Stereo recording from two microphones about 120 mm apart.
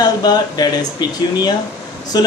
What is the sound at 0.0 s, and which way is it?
Speech, 35° left (ahead or behind).